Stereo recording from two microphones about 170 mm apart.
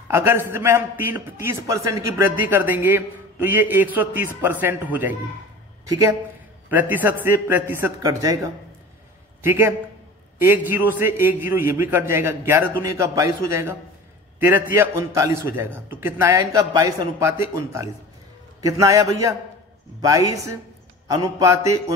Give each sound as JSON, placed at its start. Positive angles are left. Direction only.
{"t": 0.1, "sound": "a man's voice", "side_deg": -15}
{"t": 9.4, "sound": "a man's voice", "side_deg": -15}
{"t": 18.6, "sound": "a sound", "side_deg": -20}